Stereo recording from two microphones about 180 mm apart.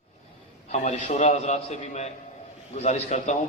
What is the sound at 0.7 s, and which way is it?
A man's voice, 40° left (ahead or behind).